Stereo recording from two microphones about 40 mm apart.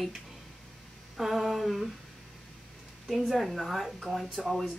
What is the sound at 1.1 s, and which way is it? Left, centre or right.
Humming, centre.